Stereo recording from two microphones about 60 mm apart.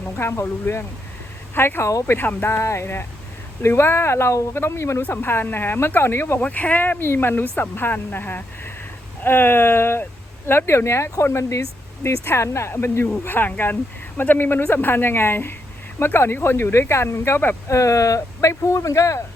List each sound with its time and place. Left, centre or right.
0.4 s a woman's voice: left
5.0 s a woman's voice: left
6.4 s a woman's voice: left
17.7 s speech: left